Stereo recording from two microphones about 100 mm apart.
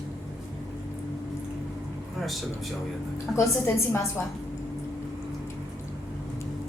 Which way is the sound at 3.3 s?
30° left (ahead or behind).